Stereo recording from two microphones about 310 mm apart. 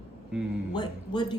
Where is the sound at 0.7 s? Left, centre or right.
Centre.